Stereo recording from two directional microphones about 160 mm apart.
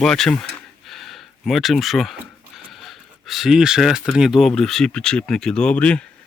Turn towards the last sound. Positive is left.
turn(degrees=5)  # may be behind; listen again after turning